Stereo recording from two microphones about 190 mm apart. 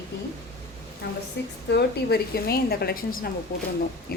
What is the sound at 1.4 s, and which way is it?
A woman's voice, 65° left (ahead or behind).